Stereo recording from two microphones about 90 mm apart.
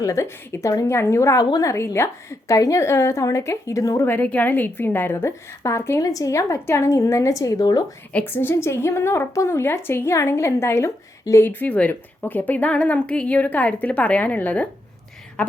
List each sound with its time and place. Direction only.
0.0 s a woman's voice: 35° left (ahead or behind)
1.4 s a woman's voice: 45° left (ahead or behind)
4.0 s a woman's voice: 20° left (ahead or behind)
6.0 s a woman's voice: 40° left (ahead or behind)
8.1 s a woman's voice: 25° left (ahead or behind)